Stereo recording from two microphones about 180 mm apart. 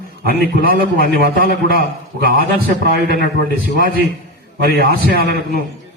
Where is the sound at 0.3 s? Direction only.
55° right (ahead or behind).